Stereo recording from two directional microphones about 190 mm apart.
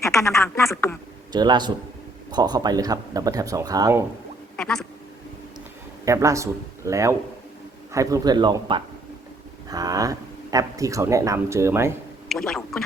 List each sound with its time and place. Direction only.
0.0 s a sound: 15° left (ahead or behind)
0.3 s speech: 10° left (ahead or behind)
1.3 s speech: 20° right (ahead or behind)
4.5 s quack: 5° left (ahead or behind)
6.1 s speech: 15° right (ahead or behind)
12.3 s speech: 5° left (ahead or behind)